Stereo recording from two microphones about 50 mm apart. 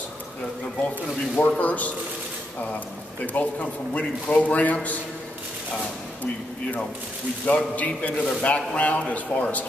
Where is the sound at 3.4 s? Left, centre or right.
Left.